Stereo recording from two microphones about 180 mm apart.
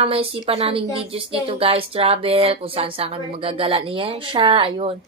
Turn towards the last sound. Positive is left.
turn(degrees=-30)  # may be behind; listen again after turning